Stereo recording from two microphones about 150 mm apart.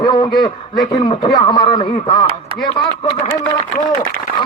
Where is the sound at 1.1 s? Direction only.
35° left (ahead or behind).